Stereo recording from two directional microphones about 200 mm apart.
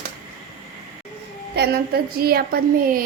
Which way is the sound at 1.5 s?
50° right (ahead or behind).